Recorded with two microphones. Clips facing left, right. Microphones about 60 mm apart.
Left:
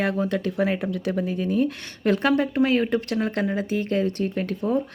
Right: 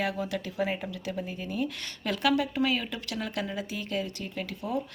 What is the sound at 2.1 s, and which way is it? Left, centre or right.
Speech, left.